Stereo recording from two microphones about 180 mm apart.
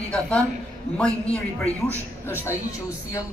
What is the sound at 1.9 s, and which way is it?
Speech, 15° left (ahead or behind).